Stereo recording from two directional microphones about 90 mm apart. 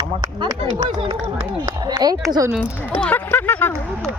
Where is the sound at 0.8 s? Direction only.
90° right.